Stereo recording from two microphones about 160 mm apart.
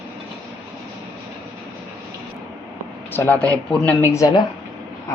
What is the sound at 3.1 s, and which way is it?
Speech, 10° left (ahead or behind).